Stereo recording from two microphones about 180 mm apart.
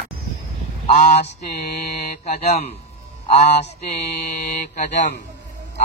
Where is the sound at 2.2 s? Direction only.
35° left (ahead or behind).